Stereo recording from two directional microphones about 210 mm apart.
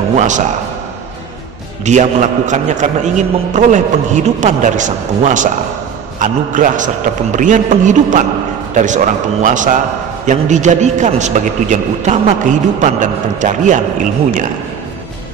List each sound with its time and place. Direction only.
0.1 s a man's voice: 35° right (ahead or behind)
1.9 s a man's voice: 35° right (ahead or behind)